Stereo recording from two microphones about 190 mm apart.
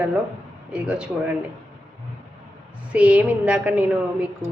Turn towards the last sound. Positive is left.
turn(degrees=-5)  # may be behind; listen again after turning